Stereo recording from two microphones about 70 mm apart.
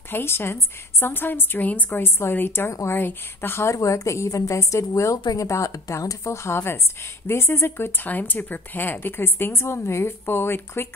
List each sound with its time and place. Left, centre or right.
0.1 s a woman's voice: left
2.7 s a woman's voice: left
3.0 s speech: left
3.7 s a woman's voice: left